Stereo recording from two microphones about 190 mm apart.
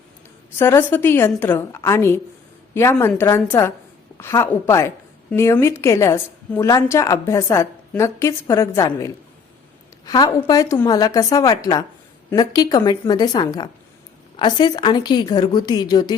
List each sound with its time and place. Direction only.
0.6 s a woman's voice: 10° left (ahead or behind)